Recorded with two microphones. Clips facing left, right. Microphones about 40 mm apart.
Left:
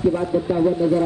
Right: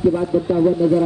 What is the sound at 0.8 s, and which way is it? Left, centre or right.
Speech, centre.